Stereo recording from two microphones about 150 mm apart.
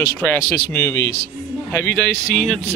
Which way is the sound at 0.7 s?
20° left (ahead or behind).